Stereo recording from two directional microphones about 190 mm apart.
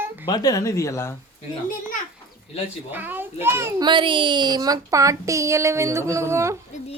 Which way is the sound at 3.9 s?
25° right (ahead or behind).